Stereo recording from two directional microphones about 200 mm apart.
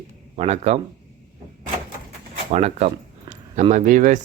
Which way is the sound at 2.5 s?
35° right (ahead or behind).